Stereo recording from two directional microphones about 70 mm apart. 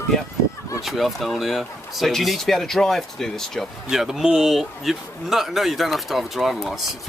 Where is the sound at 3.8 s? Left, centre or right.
Centre.